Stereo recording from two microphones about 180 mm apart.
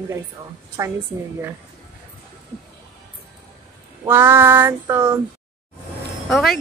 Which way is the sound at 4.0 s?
15° right (ahead or behind).